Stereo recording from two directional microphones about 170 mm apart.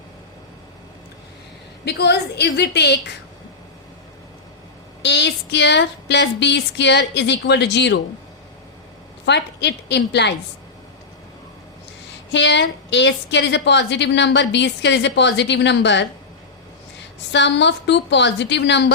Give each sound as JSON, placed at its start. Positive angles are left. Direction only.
{"t": 1.8, "sound": "a woman's voice", "side_deg": 75}
{"t": 5.0, "sound": "a woman's voice", "side_deg": 90}
{"t": 9.2, "sound": "a woman's voice", "side_deg": 90}
{"t": 12.3, "sound": "a woman's voice", "side_deg": 90}
{"t": 17.3, "sound": "a woman's voice", "side_deg": 90}